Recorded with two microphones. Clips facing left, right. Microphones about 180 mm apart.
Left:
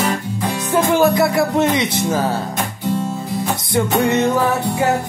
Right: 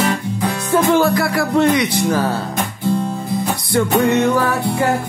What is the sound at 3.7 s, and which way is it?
Music, 20° left (ahead or behind).